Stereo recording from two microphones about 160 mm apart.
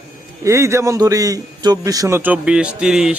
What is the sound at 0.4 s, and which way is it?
A man's voice, 20° right (ahead or behind).